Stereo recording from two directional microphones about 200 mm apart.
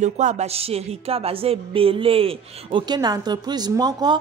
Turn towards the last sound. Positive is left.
turn(degrees=-20)  # may be behind; listen again after turning